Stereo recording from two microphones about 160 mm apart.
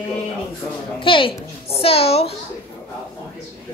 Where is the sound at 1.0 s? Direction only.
35° left (ahead or behind).